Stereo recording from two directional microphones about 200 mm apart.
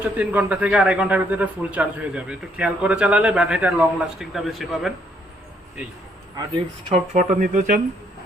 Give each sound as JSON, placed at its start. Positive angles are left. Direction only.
{"t": 0.0, "sound": "a man's voice", "side_deg": -10}
{"t": 6.8, "sound": "speech", "side_deg": -30}